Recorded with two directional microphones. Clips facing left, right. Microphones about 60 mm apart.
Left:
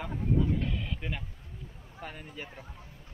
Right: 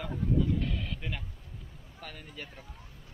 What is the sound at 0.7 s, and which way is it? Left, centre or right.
Speech, centre.